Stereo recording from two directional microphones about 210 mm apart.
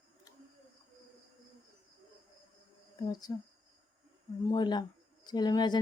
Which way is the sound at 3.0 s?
20° left (ahead or behind).